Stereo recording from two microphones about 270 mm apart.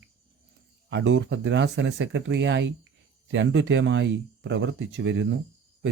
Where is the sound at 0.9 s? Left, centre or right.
Right.